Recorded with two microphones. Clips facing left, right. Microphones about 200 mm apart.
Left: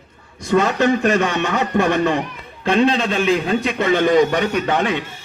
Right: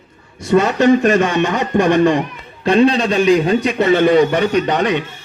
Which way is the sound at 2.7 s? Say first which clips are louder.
Right 4 dB; 15° right (ahead or behind).